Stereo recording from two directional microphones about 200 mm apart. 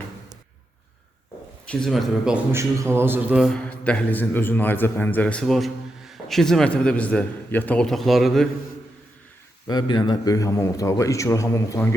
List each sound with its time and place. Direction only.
1.6 s a man's voice: 5° left (ahead or behind)
9.6 s a man's voice: 20° left (ahead or behind)